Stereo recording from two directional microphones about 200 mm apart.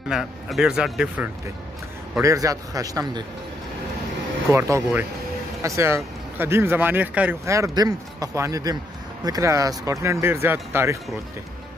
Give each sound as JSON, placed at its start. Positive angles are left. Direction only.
{"t": 0.1, "sound": "speech", "side_deg": 0}
{"t": 2.2, "sound": "speech", "side_deg": -15}
{"t": 4.5, "sound": "speech", "side_deg": -15}